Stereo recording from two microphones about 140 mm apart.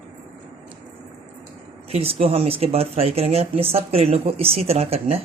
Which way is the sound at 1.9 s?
45° right (ahead or behind).